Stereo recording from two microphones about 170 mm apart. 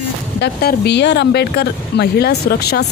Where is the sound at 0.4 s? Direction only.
80° left.